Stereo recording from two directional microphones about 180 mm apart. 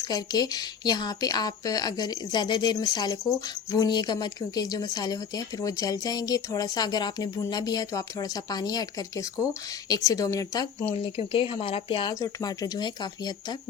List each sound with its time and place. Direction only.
0.1 s speech: 20° left (ahead or behind)